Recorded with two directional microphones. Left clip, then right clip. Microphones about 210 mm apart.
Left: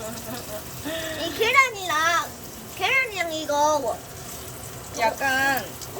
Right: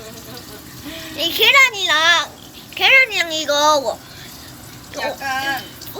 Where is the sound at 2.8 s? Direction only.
35° right (ahead or behind).